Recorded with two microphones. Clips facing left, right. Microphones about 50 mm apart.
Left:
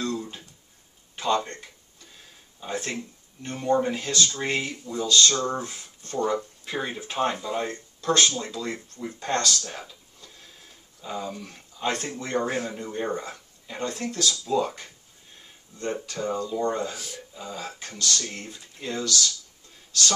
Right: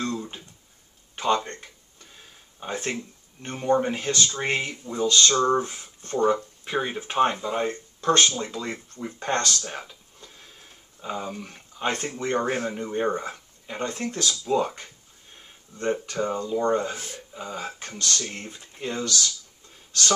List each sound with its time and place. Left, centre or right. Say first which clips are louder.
0.0 s a sound: even; right
1.1 s speech: right 1 dB; right
2.6 s speech: right 1 dB; right
9.7 s a sound: right 2 dB; right
11.0 s speech: right 1 dB; right
15.8 s speech: right 4 dB; right